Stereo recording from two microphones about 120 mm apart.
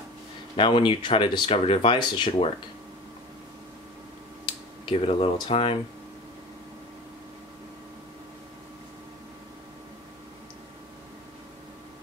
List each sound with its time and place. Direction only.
0.6 s speech: 45° left (ahead or behind)
4.8 s speech: 50° left (ahead or behind)